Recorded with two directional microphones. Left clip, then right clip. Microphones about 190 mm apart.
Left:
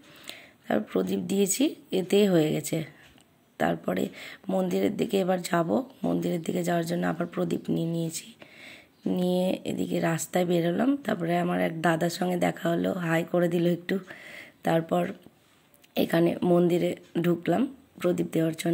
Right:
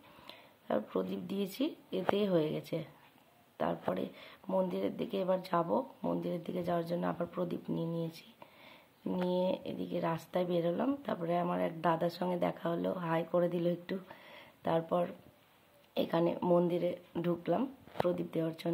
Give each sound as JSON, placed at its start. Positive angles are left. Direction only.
{"t": 0.3, "sound": "a sound", "side_deg": 20}
{"t": 1.1, "sound": "a woman's voice", "side_deg": 60}
{"t": 2.2, "sound": "speech", "side_deg": 25}
{"t": 9.3, "sound": "speech", "side_deg": 25}
{"t": 9.7, "sound": "speech", "side_deg": 70}
{"t": 9.9, "sound": "speech", "side_deg": 25}